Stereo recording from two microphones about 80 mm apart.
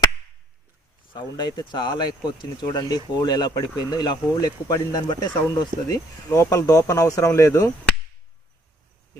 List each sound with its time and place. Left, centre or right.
1.1 s speech: left
6.3 s speech: left